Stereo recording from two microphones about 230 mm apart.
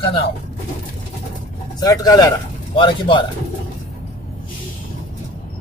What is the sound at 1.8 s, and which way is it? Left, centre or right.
Speech, centre.